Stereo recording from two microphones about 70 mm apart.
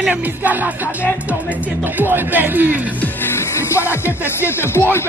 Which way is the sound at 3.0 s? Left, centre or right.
Left.